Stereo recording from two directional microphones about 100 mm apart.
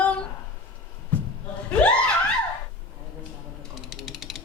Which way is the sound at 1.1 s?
15° left (ahead or behind).